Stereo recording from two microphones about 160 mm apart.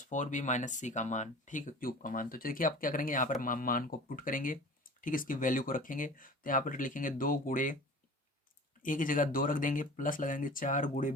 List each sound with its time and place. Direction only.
0.0 s speech: 50° left (ahead or behind)
8.8 s speech: 55° left (ahead or behind)